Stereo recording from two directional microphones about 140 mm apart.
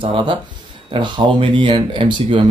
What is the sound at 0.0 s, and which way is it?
Speech, 35° right (ahead or behind).